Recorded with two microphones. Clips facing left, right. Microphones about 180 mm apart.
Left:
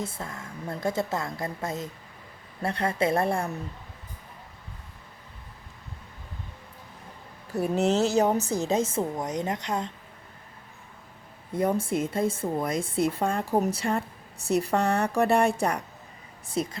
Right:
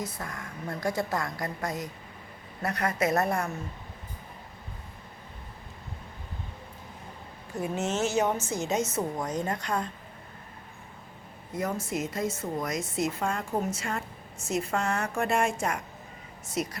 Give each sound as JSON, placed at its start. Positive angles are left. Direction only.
{"t": 0.0, "sound": "a woman's voice", "side_deg": 25}
{"t": 7.5, "sound": "a woman's voice", "side_deg": 35}
{"t": 11.5, "sound": "a woman's voice", "side_deg": 30}